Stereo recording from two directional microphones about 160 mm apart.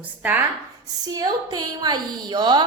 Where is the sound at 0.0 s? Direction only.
10° right (ahead or behind).